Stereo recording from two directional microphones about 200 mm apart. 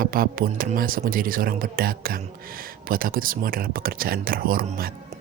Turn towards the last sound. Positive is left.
turn(degrees=-45)  # may be behind; listen again after turning